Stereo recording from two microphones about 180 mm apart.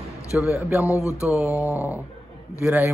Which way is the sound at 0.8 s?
15° left (ahead or behind).